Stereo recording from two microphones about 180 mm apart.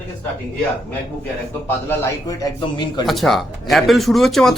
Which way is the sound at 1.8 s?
15° left (ahead or behind).